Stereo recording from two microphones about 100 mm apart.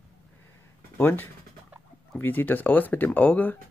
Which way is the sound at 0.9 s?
20° left (ahead or behind).